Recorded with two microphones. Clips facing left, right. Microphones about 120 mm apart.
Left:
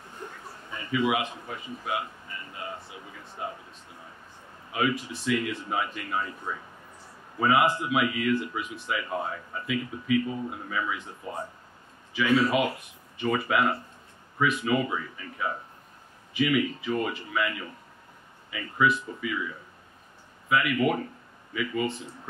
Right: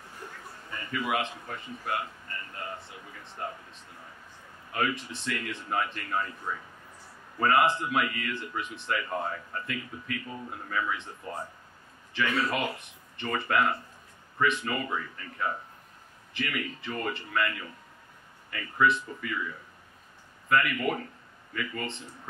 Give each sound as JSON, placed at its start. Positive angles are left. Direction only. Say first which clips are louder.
{"t": 0.7, "sound": "a man's voice", "louder": "left 5 dB", "side_deg": 0}
{"t": 4.7, "sound": "a man's voice", "louder": "left 3 dB", "side_deg": 5}